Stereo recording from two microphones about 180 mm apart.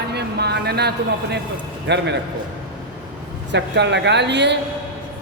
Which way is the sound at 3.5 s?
75° right (ahead or behind).